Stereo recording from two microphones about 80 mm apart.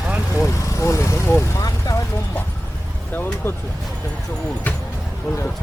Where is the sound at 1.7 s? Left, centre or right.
Left.